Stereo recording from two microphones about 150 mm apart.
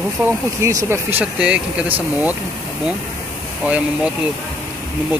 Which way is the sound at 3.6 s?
10° right (ahead or behind).